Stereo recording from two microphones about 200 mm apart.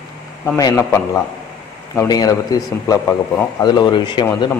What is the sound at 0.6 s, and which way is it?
A man's voice, 15° left (ahead or behind).